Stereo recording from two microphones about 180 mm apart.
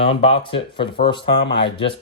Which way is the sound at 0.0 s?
30° left (ahead or behind).